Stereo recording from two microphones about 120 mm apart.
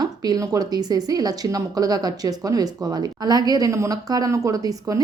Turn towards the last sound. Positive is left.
turn(degrees=-30)  # may be behind; listen again after turning